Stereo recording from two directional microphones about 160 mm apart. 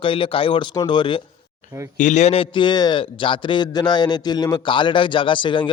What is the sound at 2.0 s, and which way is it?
A man's voice, 50° left (ahead or behind).